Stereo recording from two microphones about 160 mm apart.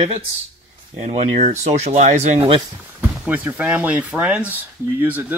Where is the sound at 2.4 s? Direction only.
35° right (ahead or behind).